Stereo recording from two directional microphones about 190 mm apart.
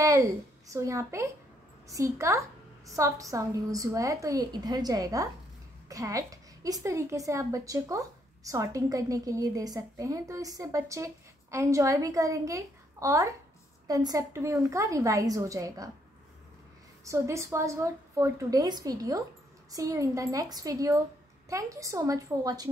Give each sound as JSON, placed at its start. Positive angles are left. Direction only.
{"t": 0.7, "sound": "a woman's voice", "side_deg": -15}
{"t": 17.0, "sound": "a woman's voice", "side_deg": -15}